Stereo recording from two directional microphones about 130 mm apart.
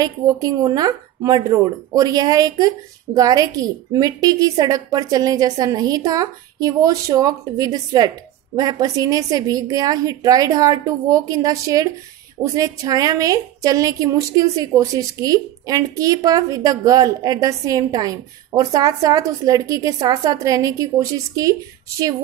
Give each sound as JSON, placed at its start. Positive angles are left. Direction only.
{"t": 0.0, "sound": "a woman's voice", "side_deg": -30}